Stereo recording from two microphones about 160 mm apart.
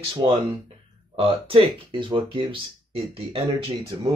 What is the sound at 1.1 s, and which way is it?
Speech, 35° right (ahead or behind).